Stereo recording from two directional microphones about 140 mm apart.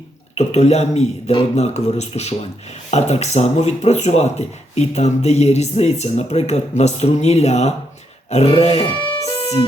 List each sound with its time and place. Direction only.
0.3 s speech: 50° left (ahead or behind)